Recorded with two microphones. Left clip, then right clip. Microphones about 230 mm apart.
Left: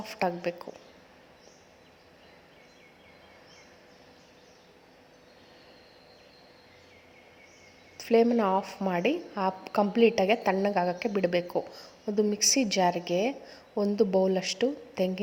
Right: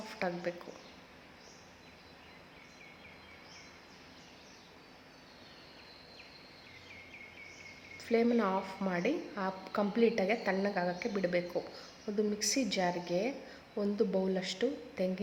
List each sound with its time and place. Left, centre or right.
0.1 s a woman's voice: left
7.9 s a woman's voice: left